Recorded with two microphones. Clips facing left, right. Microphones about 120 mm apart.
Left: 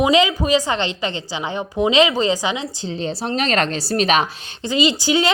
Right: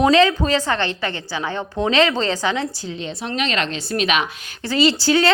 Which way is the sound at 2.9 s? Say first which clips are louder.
Left 4 dB; 35° left (ahead or behind).